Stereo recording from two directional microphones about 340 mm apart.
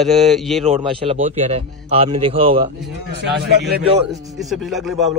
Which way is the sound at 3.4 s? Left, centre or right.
Right.